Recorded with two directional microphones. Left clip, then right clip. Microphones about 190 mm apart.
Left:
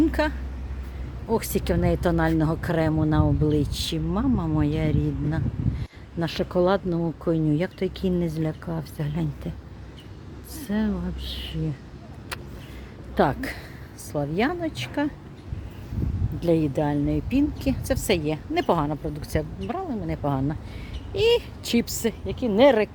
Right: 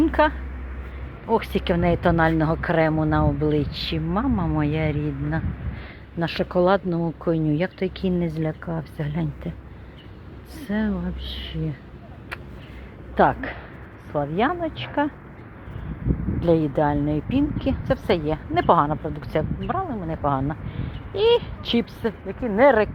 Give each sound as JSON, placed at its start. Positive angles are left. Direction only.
{"t": 0.1, "sound": "speech", "side_deg": 10}
{"t": 1.4, "sound": "speech", "side_deg": 15}
{"t": 10.7, "sound": "speech", "side_deg": 15}
{"t": 13.1, "sound": "speech", "side_deg": 20}
{"t": 16.4, "sound": "speech", "side_deg": 10}
{"t": 22.3, "sound": "speech", "side_deg": 0}
{"t": 22.6, "sound": "speech", "side_deg": 20}